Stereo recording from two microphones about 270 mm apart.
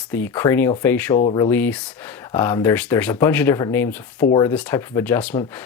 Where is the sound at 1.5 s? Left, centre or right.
Centre.